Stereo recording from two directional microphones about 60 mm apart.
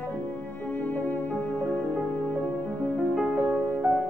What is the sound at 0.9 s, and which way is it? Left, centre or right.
Music, left.